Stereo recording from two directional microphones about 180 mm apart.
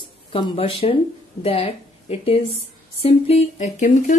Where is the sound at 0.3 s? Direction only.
30° left (ahead or behind).